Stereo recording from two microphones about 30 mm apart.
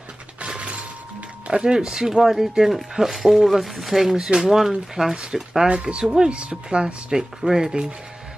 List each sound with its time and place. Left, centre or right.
0.4 s music: right
1.5 s speech: right
2.2 s speech: centre
4.3 s speech: right
5.1 s speech: right